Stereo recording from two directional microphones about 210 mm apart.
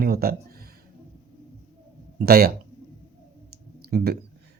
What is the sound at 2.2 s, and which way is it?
Speech, 45° right (ahead or behind).